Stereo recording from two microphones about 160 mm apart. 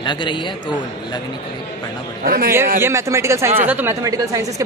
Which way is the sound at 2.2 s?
65° right (ahead or behind).